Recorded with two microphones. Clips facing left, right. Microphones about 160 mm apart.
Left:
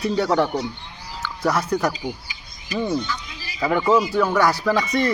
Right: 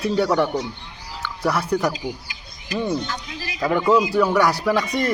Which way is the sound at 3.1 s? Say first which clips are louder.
Right 1 dB; 55° right (ahead or behind).